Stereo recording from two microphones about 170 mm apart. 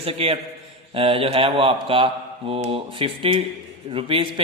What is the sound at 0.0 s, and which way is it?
A man's voice, 35° right (ahead or behind).